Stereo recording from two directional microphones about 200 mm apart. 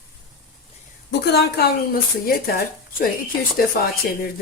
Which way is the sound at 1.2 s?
55° left (ahead or behind).